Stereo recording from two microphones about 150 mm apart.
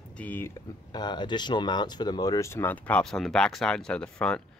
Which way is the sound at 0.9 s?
30° left (ahead or behind).